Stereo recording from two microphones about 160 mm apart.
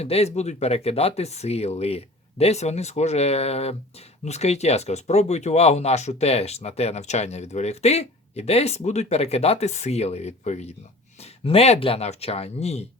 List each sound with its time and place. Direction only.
0.0 s speech: 40° left (ahead or behind)